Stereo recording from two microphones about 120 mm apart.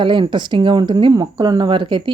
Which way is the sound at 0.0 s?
40° right (ahead or behind).